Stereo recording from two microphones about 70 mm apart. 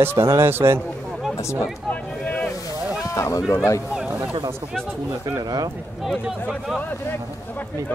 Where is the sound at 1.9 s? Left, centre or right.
Left.